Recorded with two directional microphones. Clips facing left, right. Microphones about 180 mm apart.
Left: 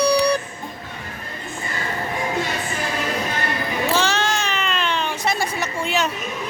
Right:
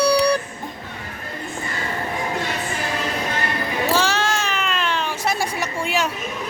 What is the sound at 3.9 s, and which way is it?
Baby cry, 10° right (ahead or behind).